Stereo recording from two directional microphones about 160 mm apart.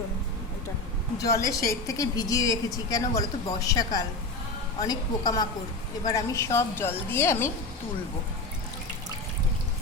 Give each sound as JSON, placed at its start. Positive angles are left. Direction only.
{"t": 1.2, "sound": "a woman's voice", "side_deg": 20}